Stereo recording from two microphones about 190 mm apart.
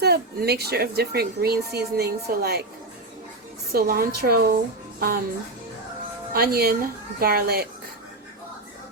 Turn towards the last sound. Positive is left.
turn(degrees=-55)  # may be behind; listen again after turning